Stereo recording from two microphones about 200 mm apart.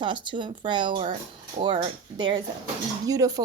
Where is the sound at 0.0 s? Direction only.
25° right (ahead or behind).